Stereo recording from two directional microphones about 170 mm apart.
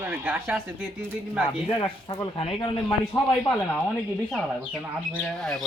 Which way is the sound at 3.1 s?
20° left (ahead or behind).